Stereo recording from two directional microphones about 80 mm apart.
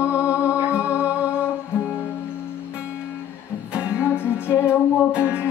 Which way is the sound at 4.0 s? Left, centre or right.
Left.